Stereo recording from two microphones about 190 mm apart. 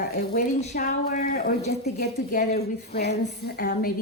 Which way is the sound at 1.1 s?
50° left (ahead or behind).